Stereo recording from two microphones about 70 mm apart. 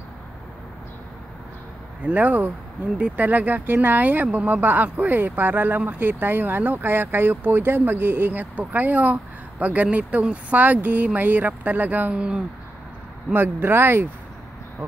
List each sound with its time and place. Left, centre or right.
2.0 s speech: right
12.1 s speech: centre
13.3 s speech: right